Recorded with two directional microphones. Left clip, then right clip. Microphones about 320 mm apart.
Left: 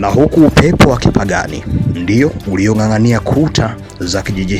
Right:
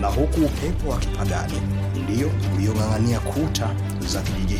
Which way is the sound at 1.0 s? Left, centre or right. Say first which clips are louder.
Left 14 dB; right.